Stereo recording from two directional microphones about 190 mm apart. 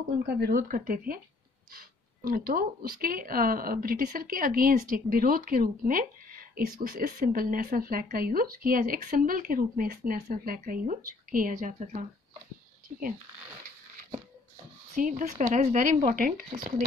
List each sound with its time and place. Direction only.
0.3 s speech: 55° right (ahead or behind)
15.0 s speech: 45° right (ahead or behind)